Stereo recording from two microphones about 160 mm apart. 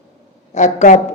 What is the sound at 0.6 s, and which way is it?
Speech, 50° left (ahead or behind).